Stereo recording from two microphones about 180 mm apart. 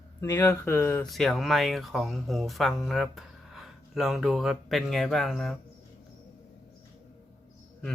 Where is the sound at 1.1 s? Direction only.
Centre (ahead or behind).